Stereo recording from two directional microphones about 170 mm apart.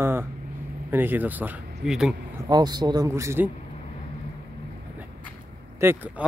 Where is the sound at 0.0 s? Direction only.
15° right (ahead or behind).